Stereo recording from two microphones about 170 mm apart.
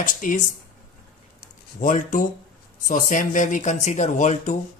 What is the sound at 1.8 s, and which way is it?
Speech, 50° left (ahead or behind).